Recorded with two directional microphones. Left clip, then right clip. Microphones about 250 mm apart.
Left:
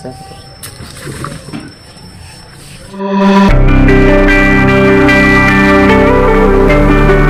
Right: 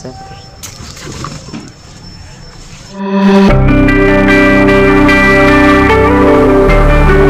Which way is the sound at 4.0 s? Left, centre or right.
Centre.